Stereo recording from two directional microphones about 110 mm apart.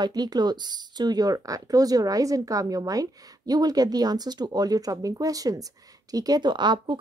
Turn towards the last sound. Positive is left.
turn(degrees=-45)  # may be behind; listen again after turning